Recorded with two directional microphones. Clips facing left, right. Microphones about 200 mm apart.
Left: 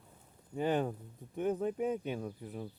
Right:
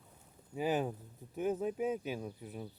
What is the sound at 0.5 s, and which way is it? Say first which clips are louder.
Speech: left 2 dB; 5° right (ahead or behind).